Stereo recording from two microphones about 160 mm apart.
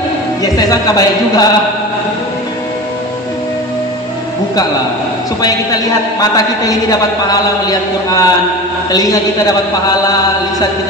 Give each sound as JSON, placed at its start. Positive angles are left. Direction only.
{"t": 0.4, "sound": "a man's voice", "side_deg": 25}
{"t": 6.1, "sound": "a man's voice", "side_deg": 20}